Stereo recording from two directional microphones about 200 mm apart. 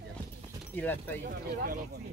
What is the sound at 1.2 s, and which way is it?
Speech, 45° right (ahead or behind).